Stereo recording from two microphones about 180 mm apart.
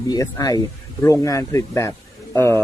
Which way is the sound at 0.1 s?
20° left (ahead or behind).